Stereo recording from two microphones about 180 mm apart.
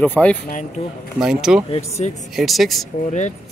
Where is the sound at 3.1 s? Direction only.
40° left (ahead or behind).